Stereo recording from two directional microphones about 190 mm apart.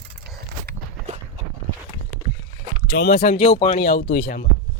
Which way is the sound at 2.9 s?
50° left (ahead or behind).